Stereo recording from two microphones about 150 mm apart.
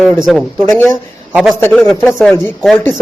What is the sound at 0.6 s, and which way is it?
Speech, 15° left (ahead or behind).